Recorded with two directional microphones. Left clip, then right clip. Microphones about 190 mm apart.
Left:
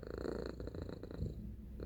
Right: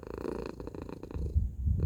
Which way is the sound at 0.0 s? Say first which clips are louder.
Right 5 dB; 30° right (ahead or behind).